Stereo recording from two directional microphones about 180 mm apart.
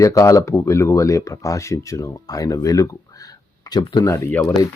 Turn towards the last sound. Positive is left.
turn(degrees=15)  # may be behind; listen again after turning